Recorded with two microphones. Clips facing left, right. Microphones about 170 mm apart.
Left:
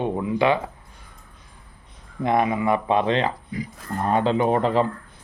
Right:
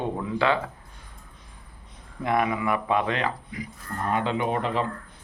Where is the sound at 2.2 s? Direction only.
25° left (ahead or behind).